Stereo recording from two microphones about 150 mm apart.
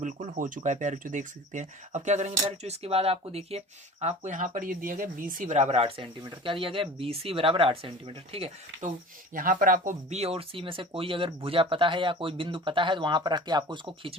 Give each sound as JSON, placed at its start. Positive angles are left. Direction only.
{"t": 0.0, "sound": "speech", "side_deg": -55}
{"t": 9.3, "sound": "speech", "side_deg": -65}
{"t": 10.1, "sound": "speech", "side_deg": -45}